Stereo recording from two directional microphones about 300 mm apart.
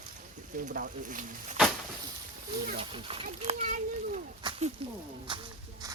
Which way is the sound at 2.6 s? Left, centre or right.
Centre.